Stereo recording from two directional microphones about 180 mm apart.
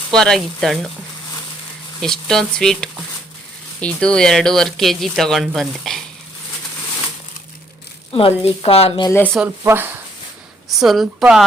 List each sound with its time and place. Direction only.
0.1 s speech: 5° left (ahead or behind)
2.0 s speech: centre (ahead or behind)
8.1 s speech: 30° left (ahead or behind)
9.0 s speech: 15° left (ahead or behind)
9.6 s speech: 10° right (ahead or behind)
10.7 s speech: centre (ahead or behind)